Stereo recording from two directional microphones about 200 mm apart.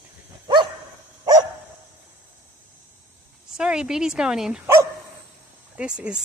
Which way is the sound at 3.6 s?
5° right (ahead or behind).